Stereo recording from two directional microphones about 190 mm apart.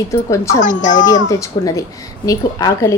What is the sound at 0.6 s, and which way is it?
Speech, 40° left (ahead or behind).